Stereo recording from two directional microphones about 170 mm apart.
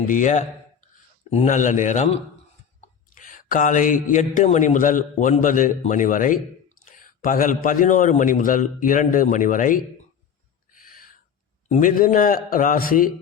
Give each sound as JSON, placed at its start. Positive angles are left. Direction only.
{"t": 0.1, "sound": "a man's voice", "side_deg": 45}
{"t": 3.2, "sound": "a man's voice", "side_deg": 50}
{"t": 10.7, "sound": "a sound", "side_deg": 55}
{"t": 11.7, "sound": "a man's voice", "side_deg": 55}